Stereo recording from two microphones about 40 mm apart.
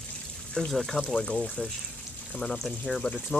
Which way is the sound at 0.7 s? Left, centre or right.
Centre.